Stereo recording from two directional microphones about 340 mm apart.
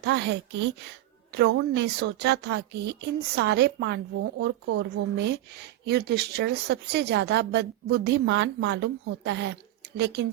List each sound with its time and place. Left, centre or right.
0.0 s a woman's voice: right